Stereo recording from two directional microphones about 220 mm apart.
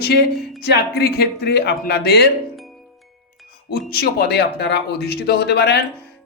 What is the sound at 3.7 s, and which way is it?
A man's voice, 45° left (ahead or behind).